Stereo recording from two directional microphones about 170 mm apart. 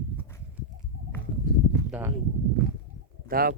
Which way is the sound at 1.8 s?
10° right (ahead or behind).